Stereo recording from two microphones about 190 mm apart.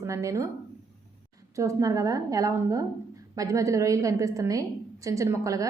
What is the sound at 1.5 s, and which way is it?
A woman's voice, 15° right (ahead or behind).